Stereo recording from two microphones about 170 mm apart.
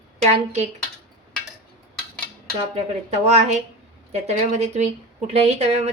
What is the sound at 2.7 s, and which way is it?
A woman's voice, 40° right (ahead or behind).